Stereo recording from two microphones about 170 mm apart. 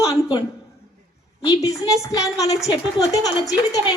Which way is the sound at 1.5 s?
20° left (ahead or behind).